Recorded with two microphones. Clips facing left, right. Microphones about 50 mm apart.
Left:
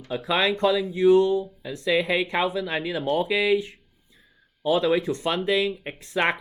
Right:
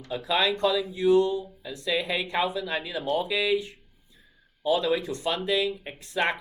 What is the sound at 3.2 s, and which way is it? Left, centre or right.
Speech, left.